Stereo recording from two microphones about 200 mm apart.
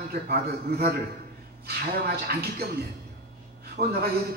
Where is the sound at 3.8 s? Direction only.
35° right (ahead or behind).